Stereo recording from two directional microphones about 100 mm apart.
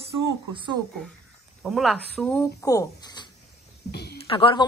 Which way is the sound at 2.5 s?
35° left (ahead or behind).